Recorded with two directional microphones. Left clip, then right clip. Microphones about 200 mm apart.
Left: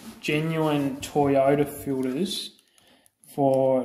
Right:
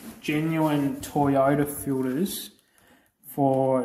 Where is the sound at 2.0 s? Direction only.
5° right (ahead or behind).